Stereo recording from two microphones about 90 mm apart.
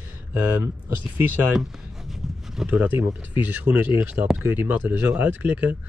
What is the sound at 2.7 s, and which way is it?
Speech, 15° right (ahead or behind).